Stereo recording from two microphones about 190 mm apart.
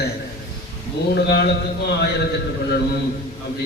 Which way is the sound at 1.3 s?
60° left (ahead or behind).